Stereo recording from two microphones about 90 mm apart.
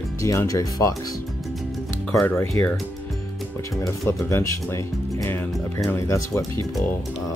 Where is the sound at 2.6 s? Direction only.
30° left (ahead or behind).